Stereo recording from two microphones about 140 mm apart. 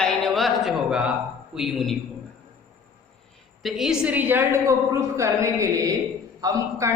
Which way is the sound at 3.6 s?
Centre (ahead or behind).